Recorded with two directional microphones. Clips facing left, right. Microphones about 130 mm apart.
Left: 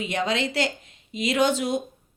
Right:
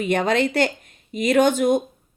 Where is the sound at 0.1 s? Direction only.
55° right (ahead or behind).